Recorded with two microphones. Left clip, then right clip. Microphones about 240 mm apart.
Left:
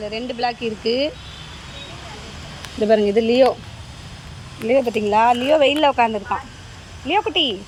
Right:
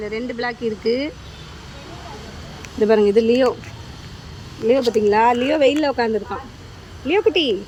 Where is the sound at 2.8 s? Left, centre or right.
Right.